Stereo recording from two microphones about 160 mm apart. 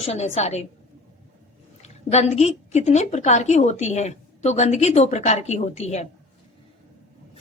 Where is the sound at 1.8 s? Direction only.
45° left (ahead or behind).